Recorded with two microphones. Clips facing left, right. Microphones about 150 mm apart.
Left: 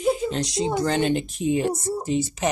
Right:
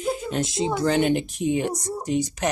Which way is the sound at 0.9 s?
10° right (ahead or behind).